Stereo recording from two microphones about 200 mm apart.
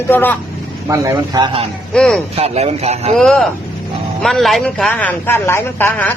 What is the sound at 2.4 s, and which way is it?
Speech, 30° right (ahead or behind).